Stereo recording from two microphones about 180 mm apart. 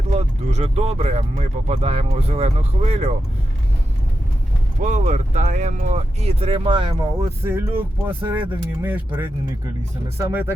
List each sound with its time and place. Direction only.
0.1 s speech: 35° right (ahead or behind)
4.8 s speech: 40° right (ahead or behind)
7.4 s speech: 10° right (ahead or behind)